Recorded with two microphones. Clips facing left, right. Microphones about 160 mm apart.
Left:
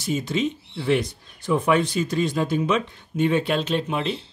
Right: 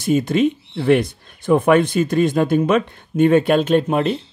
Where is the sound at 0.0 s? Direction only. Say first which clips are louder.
Right 8 dB; 55° right (ahead or behind).